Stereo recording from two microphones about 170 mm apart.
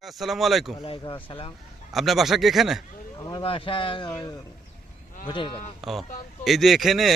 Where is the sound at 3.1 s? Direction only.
25° left (ahead or behind).